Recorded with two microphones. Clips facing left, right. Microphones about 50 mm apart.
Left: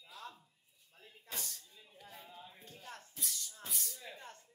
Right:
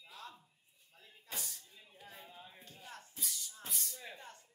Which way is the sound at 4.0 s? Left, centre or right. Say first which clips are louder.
Right 1 dB; centre.